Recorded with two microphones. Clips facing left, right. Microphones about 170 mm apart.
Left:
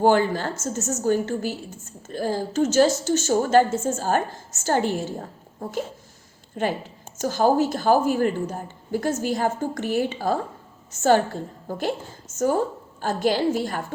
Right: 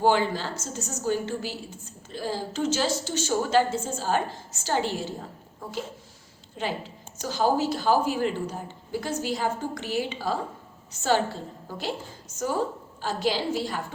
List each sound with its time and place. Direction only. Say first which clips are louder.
0.0 s a woman's voice: left 4 dB; 50° left (ahead or behind)
13.0 s a woman's voice: left 5 dB; 50° left (ahead or behind)